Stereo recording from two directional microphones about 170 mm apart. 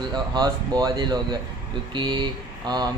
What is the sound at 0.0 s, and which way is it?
Speech, 25° right (ahead or behind).